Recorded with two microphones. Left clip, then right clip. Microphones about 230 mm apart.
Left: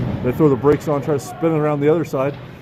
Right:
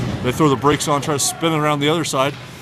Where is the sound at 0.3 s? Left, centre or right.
Right.